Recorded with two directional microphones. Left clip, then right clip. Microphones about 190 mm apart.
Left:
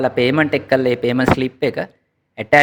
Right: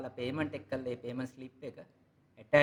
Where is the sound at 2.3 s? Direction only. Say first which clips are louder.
Left 17 dB; 40° left (ahead or behind).